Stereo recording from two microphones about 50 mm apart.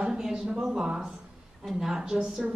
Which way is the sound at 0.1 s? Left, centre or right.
Centre.